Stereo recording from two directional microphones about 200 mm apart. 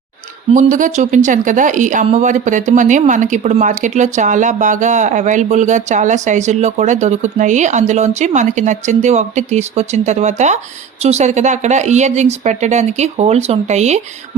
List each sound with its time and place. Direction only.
0.5 s speech: 40° right (ahead or behind)